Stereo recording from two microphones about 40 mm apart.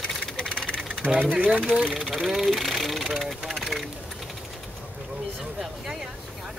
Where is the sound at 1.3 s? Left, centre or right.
Right.